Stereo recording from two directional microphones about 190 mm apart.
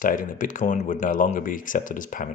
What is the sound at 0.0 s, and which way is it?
Speech, 45° left (ahead or behind).